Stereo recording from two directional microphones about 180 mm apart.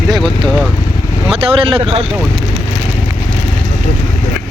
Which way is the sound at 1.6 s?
30° right (ahead or behind).